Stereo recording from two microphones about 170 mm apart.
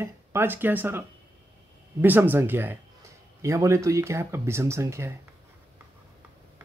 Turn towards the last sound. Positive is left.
turn(degrees=-15)  # may be behind; listen again after turning